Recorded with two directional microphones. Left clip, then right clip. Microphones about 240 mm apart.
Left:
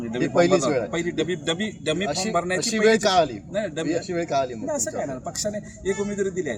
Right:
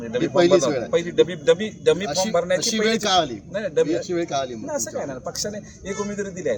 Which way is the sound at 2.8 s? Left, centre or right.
Left.